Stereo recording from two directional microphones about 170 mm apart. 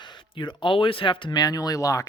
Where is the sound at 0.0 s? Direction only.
30° left (ahead or behind).